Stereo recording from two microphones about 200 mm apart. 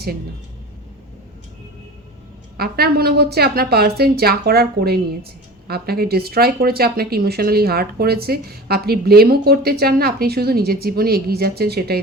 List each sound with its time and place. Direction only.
2.6 s speech: 50° right (ahead or behind)